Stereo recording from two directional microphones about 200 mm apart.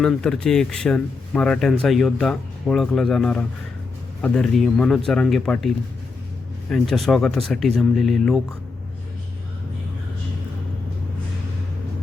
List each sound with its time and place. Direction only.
0.0 s speech: 5° left (ahead or behind)